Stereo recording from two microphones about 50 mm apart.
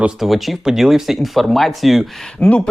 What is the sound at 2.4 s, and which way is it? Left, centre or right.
Speech, left.